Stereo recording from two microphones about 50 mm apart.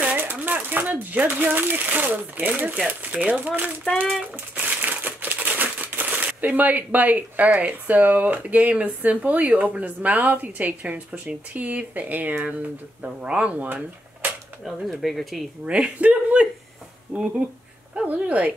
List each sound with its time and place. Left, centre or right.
0.0 s a sound: right
1.2 s speech: right
4.6 s crushing: right
13.0 s speech: right
14.6 s speech: centre
15.8 s speech: right